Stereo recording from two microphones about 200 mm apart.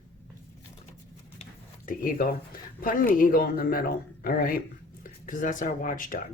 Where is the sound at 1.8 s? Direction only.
45° left (ahead or behind).